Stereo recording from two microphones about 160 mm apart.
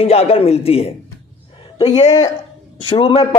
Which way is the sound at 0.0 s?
40° left (ahead or behind).